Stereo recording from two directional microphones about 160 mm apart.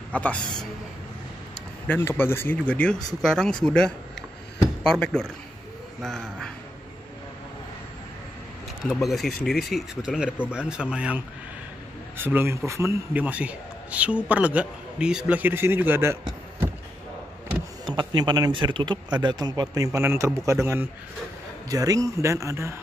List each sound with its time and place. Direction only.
0.1 s speech: 10° left (ahead or behind)
1.9 s speech: 15° left (ahead or behind)
8.8 s a man's voice: centre (ahead or behind); by 16.7 s 15° right (ahead or behind)
17.8 s a man's voice: 30° right (ahead or behind)